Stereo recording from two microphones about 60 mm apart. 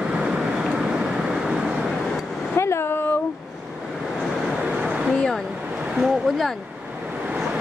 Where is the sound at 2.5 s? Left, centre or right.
Left.